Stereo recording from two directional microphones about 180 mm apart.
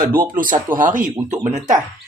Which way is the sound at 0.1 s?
50° right (ahead or behind).